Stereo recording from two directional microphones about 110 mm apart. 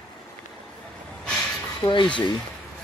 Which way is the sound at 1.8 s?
45° left (ahead or behind).